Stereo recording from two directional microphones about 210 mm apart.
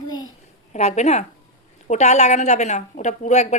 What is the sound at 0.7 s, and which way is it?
A woman's voice, 35° left (ahead or behind).